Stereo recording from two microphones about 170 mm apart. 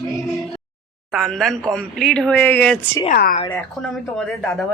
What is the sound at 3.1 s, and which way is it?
Speech, 60° left (ahead or behind).